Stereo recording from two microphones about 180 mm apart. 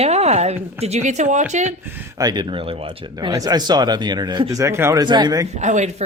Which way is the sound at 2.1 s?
25° right (ahead or behind).